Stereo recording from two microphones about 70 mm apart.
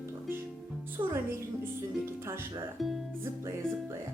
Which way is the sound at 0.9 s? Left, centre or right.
Right.